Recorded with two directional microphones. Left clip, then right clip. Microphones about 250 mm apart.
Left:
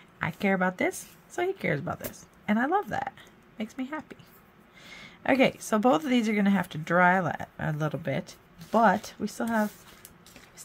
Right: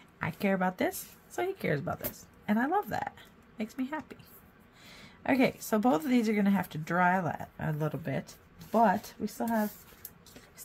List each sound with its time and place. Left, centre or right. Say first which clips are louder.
0.2 s a woman's voice: left 4 dB; centre